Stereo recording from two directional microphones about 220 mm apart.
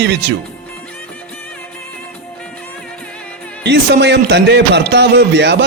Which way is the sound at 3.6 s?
50° right (ahead or behind).